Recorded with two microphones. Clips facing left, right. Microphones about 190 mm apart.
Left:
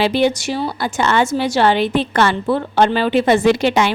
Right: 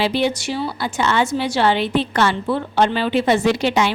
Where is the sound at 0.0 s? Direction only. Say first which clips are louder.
Left 3 dB; 50° left (ahead or behind).